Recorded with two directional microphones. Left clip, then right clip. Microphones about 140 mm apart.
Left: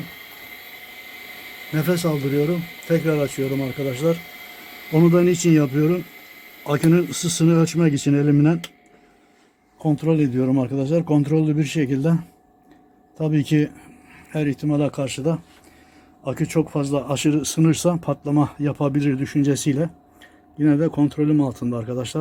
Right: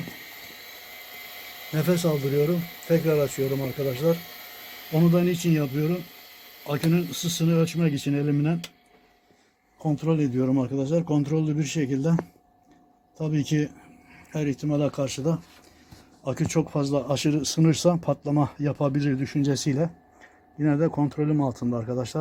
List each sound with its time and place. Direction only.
1.7 s speech: centre (ahead or behind)
4.9 s a man's voice: 20° left (ahead or behind)
9.7 s a man's voice: 20° left (ahead or behind)
13.1 s a man's voice: 25° left (ahead or behind); by 19.8 s centre (ahead or behind)
20.6 s a man's voice: 20° left (ahead or behind)
21.4 s speech: centre (ahead or behind)
21.7 s a man's voice: 25° left (ahead or behind)
21.9 s speech: centre (ahead or behind)